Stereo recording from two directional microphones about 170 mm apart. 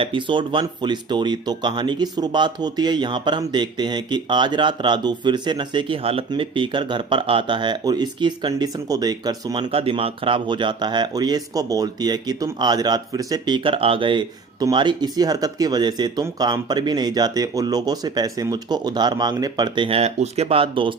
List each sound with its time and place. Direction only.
0.0 s speech: 30° right (ahead or behind)